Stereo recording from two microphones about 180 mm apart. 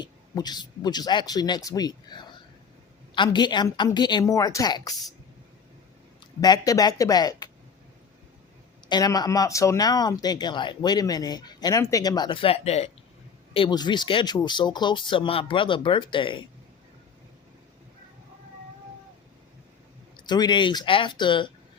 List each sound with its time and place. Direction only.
0.0 s speech: 25° left (ahead or behind)
6.4 s speech: 20° left (ahead or behind)
8.9 s speech: 20° left (ahead or behind)
20.1 s speech: 25° left (ahead or behind)